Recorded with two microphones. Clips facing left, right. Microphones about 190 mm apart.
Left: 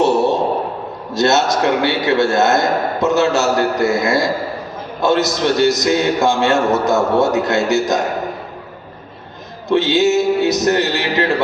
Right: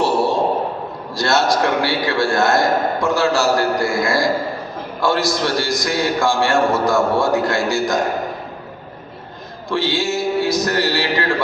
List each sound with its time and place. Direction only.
1.1 s a man's voice: 20° left (ahead or behind)
9.6 s a man's voice: 20° left (ahead or behind)